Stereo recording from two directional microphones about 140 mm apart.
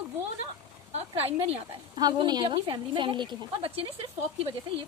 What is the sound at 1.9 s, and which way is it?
A woman's voice, 30° right (ahead or behind).